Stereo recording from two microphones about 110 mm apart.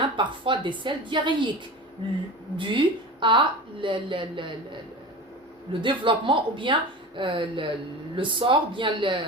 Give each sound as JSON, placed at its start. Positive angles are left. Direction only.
{"t": 0.0, "sound": "a woman's voice", "side_deg": -45}
{"t": 2.6, "sound": "a woman's voice", "side_deg": -50}
{"t": 5.8, "sound": "a woman's voice", "side_deg": -45}